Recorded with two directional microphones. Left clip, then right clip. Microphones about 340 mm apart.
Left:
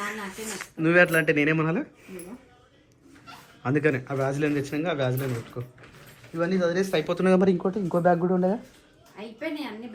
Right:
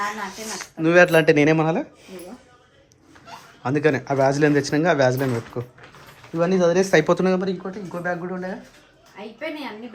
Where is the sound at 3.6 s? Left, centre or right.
Centre.